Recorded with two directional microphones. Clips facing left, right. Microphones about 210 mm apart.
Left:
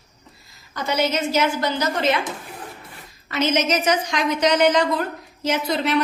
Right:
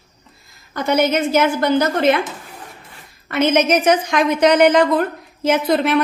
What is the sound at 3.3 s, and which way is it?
A woman's voice, 55° right (ahead or behind).